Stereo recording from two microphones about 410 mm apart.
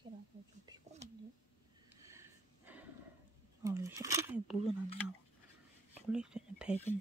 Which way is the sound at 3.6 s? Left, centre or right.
Centre.